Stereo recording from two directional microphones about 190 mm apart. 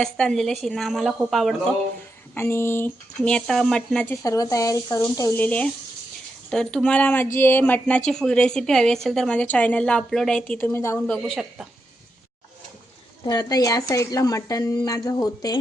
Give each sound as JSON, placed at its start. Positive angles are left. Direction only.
{"t": 0.0, "sound": "a woman's voice", "side_deg": 5}
{"t": 2.3, "sound": "a woman's voice", "side_deg": 15}
{"t": 13.2, "sound": "speech", "side_deg": 20}